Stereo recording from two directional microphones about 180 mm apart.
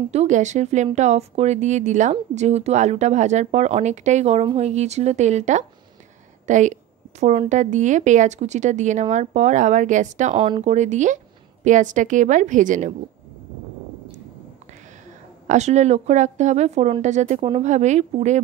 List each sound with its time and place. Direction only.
0.1 s speech: 40° right (ahead or behind)
10.3 s a woman's voice: 30° right (ahead or behind); by 12.9 s 45° right (ahead or behind)
15.4 s speech: 40° right (ahead or behind)